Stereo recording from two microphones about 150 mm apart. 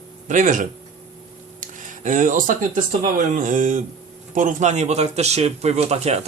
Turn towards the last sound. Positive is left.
turn(degrees=-45)  # may be behind; listen again after turning